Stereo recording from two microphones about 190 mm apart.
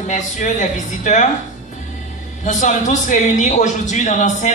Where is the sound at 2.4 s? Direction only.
40° left (ahead or behind).